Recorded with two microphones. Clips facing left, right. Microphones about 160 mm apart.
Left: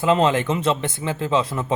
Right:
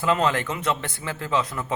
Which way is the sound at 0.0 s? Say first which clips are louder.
Left 4 dB; 25° left (ahead or behind).